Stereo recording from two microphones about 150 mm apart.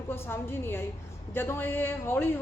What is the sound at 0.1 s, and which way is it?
A woman's voice, 15° left (ahead or behind).